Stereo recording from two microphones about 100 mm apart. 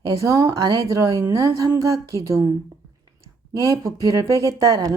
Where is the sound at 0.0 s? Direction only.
35° right (ahead or behind).